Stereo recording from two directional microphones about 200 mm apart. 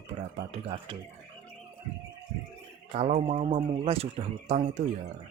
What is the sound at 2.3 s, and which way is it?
Speech, 35° right (ahead or behind).